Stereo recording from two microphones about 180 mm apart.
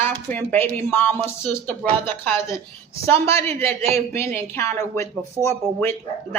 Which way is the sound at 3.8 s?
35° right (ahead or behind).